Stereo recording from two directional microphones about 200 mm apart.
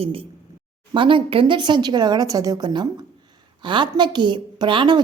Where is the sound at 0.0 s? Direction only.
30° right (ahead or behind).